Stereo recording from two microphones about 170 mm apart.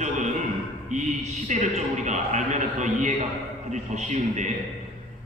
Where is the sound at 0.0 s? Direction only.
45° right (ahead or behind).